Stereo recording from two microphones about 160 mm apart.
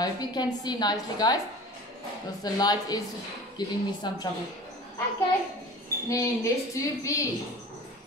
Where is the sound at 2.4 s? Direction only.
25° left (ahead or behind).